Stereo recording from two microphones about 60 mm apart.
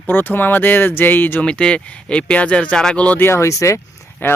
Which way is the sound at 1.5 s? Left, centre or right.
Centre.